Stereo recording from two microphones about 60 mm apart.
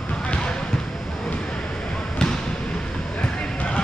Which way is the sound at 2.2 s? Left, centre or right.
Centre.